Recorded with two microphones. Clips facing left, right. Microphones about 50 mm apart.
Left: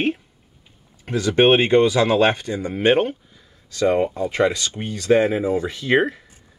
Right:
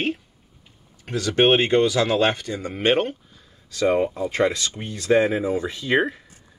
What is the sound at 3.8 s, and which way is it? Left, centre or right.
Speech, centre.